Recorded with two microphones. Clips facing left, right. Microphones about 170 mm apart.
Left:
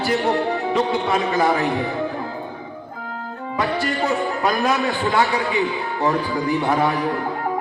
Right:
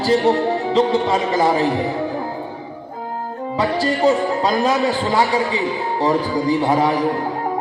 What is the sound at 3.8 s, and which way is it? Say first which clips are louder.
Speech: right 5 dB; 25° right (ahead or behind).